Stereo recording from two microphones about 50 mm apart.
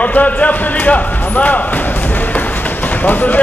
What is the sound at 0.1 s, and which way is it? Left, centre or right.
Speech, left.